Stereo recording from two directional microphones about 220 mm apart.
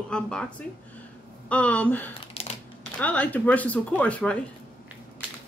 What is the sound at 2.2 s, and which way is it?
Typing, 25° left (ahead or behind).